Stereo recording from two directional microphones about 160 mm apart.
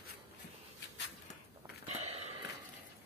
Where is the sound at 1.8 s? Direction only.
40° right (ahead or behind).